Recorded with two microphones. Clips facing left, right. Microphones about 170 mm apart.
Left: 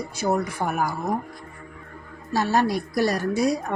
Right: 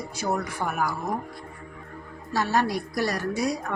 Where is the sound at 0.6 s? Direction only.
35° left (ahead or behind).